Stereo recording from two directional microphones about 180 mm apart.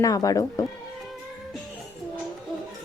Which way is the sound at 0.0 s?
20° left (ahead or behind).